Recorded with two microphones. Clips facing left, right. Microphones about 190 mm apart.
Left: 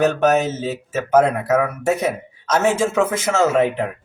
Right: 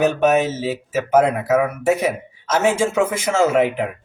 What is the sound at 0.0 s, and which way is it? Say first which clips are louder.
Speech: even; 10° right (ahead or behind).